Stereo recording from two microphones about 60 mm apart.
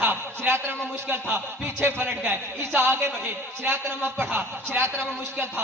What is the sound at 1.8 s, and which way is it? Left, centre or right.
A man's voice, right.